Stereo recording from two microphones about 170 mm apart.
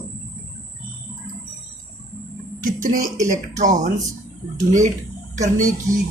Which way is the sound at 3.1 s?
20° right (ahead or behind).